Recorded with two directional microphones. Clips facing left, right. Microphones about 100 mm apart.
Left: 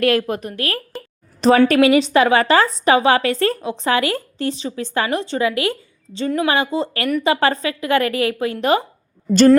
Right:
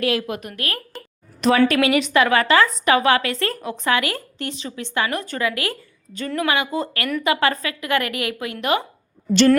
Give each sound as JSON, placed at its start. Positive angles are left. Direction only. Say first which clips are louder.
{"t": 0.0, "sound": "a woman's voice", "louder": "left 5 dB", "side_deg": 45}